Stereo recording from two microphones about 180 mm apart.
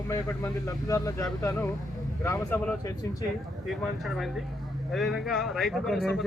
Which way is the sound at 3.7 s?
Centre (ahead or behind).